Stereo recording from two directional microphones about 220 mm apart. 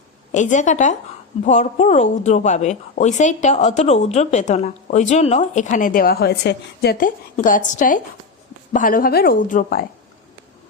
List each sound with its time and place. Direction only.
0.3 s a woman's voice: 35° left (ahead or behind)
7.3 s a woman's voice: 35° left (ahead or behind)